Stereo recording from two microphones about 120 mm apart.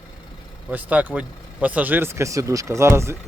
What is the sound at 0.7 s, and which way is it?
Speech, 15° right (ahead or behind).